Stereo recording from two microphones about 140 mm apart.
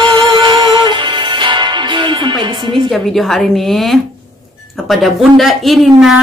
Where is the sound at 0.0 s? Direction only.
35° right (ahead or behind).